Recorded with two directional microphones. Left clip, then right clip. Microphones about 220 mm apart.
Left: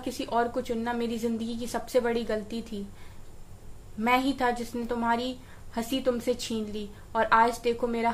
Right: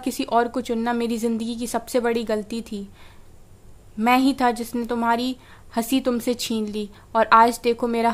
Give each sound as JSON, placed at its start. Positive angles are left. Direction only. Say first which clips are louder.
{"t": 0.0, "sound": "a woman's voice", "louder": "right 7 dB", "side_deg": -50}
{"t": 4.0, "sound": "a woman's voice", "louder": "right 6 dB", "side_deg": -50}